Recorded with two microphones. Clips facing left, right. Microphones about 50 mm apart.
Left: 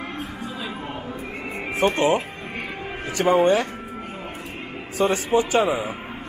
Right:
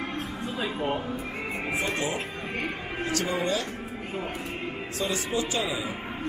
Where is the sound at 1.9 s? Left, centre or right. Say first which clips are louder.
Left 9 dB; left.